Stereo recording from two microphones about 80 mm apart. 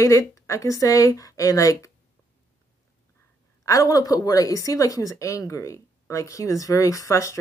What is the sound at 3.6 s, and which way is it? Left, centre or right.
Speech, left.